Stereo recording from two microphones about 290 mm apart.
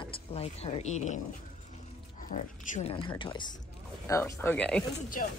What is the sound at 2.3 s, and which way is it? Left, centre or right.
A woman's voice, left.